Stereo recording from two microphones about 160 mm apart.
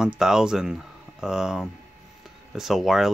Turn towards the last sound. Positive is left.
turn(degrees=0)  # may be behind; listen again after turning